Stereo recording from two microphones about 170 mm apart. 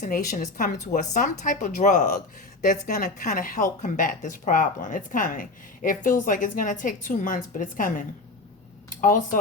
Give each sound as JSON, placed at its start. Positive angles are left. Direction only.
{"t": 0.0, "sound": "a woman's voice", "side_deg": 50}